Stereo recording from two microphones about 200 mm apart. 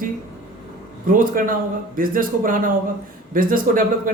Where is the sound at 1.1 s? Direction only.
45° right (ahead or behind).